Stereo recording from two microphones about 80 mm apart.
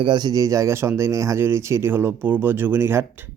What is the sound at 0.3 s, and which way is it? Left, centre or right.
Speech, right.